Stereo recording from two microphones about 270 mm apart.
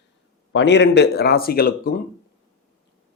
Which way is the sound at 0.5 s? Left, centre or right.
Left.